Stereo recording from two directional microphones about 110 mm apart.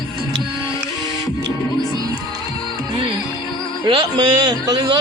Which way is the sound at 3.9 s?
45° right (ahead or behind).